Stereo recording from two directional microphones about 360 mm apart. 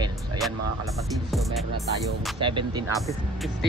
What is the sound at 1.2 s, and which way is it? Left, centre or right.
Speech, centre.